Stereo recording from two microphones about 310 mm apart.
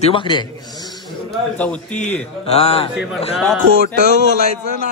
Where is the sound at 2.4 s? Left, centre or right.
Centre.